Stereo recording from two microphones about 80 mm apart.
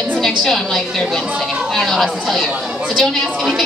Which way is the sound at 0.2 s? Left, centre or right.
Centre.